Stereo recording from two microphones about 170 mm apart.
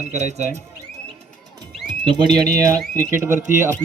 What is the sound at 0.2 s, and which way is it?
Speech, 40° right (ahead or behind).